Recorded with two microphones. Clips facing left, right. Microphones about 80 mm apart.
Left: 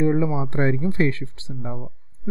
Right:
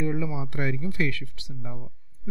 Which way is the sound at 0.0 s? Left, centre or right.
Left.